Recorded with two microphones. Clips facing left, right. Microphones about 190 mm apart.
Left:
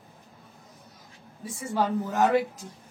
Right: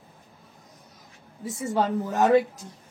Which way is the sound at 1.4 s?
20° right (ahead or behind).